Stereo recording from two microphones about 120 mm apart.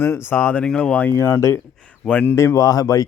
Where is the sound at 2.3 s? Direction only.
25° left (ahead or behind).